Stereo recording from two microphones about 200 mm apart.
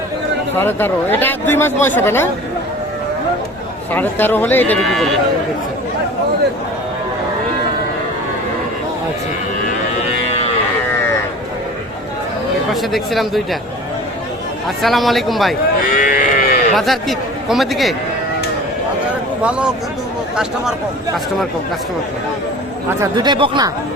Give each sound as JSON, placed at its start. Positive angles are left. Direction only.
{"t": 0.5, "sound": "speech", "side_deg": 10}
{"t": 3.9, "sound": "speech", "side_deg": 10}
{"t": 12.7, "sound": "speech", "side_deg": 0}
{"t": 14.8, "sound": "speech", "side_deg": 0}
{"t": 15.9, "sound": "cattle", "side_deg": 40}
{"t": 16.7, "sound": "speech", "side_deg": 0}
{"t": 19.4, "sound": "speech", "side_deg": -5}
{"t": 22.9, "sound": "speech", "side_deg": -20}